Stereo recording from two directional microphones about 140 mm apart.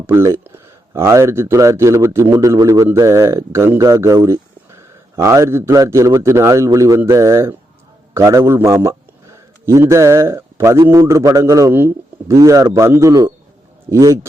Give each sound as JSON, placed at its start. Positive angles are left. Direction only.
{"t": 0.1, "sound": "speech", "side_deg": -15}